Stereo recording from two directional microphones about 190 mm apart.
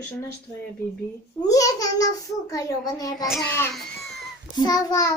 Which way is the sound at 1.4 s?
20° left (ahead or behind).